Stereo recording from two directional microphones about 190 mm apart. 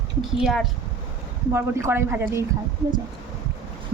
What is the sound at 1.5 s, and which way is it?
Speech, 15° right (ahead or behind).